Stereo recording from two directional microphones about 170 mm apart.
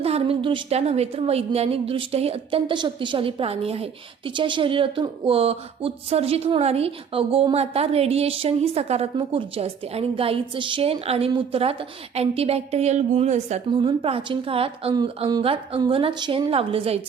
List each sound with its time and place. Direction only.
0.0 s speech: 35° right (ahead or behind)
13.7 s speech: 30° right (ahead or behind)